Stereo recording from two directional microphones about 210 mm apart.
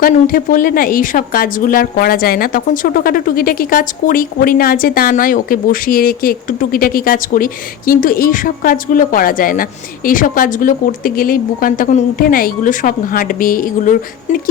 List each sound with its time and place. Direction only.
0.0 s a woman's voice: 45° left (ahead or behind)